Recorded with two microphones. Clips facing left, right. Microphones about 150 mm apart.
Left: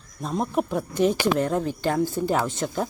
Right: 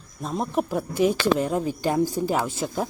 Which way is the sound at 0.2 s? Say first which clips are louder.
Left 1 dB; centre (ahead or behind).